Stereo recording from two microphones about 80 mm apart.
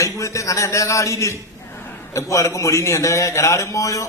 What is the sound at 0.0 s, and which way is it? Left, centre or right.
A man's voice, left.